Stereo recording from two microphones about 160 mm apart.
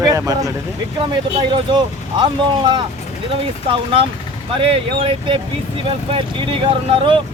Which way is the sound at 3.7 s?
35° right (ahead or behind).